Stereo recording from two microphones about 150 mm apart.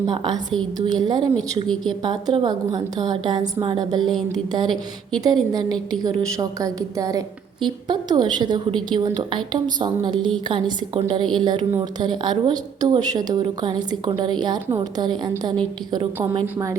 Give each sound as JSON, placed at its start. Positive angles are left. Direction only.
{"t": 0.0, "sound": "a woman's voice", "side_deg": -30}
{"t": 1.6, "sound": "a woman's voice", "side_deg": 5}
{"t": 2.0, "sound": "a woman's voice", "side_deg": -30}